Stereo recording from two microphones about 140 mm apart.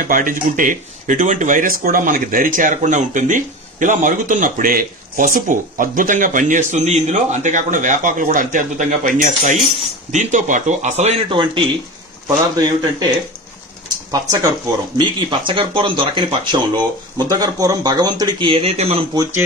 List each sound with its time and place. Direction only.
0.0 s a man's voice: 75° right (ahead or behind); by 11.2 s 50° right (ahead or behind)
11.2 s speech: 35° right (ahead or behind)
13.8 s bird: 25° right (ahead or behind)
15.0 s speech: 35° right (ahead or behind)